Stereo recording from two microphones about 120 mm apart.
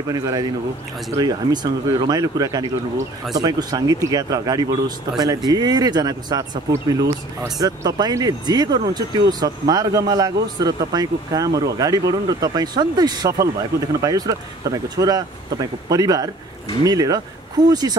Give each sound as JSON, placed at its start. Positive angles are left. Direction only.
{"t": 0.1, "sound": "speech", "side_deg": -35}